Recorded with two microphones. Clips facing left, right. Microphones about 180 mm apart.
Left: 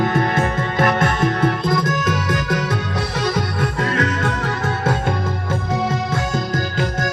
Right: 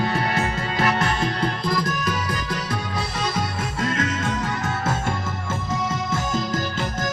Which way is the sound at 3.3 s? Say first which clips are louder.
Left 5 dB; 65° left (ahead or behind).